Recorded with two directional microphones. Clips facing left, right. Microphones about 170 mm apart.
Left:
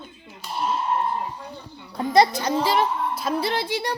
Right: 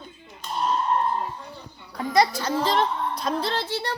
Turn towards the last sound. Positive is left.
turn(degrees=15)  # may be behind; listen again after turning